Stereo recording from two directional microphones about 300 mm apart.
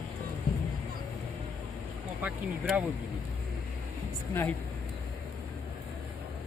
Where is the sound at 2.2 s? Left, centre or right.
Centre.